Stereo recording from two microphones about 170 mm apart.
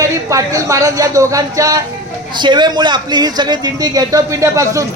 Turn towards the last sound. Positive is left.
turn(degrees=-20)  # may be behind; listen again after turning